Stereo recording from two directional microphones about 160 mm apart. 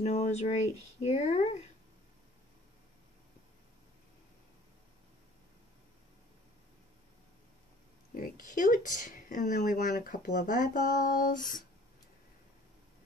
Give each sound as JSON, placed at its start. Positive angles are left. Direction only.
{"t": 0.0, "sound": "speech", "side_deg": 45}
{"t": 8.1, "sound": "speech", "side_deg": 60}